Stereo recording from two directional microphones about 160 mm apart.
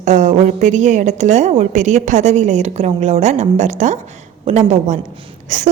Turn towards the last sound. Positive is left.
turn(degrees=-50)  # may be behind; listen again after turning